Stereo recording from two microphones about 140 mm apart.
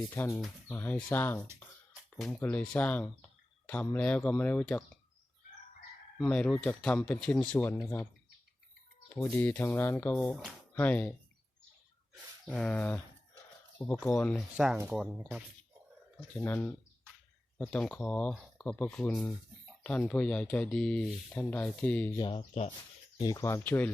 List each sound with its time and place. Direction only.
0.1 s speech: 15° left (ahead or behind)
6.1 s speech: 10° left (ahead or behind)
9.0 s speech: 15° left (ahead or behind)
12.5 s speech: 10° left (ahead or behind)
14.3 s speech: 5° right (ahead or behind)
16.3 s speech: 15° left (ahead or behind)
22.3 s speech: 45° left (ahead or behind)
23.2 s speech: 25° left (ahead or behind)